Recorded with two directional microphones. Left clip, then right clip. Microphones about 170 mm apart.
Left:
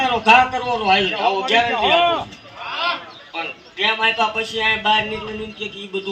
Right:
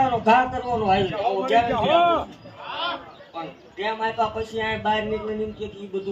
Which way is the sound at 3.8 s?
15° right (ahead or behind).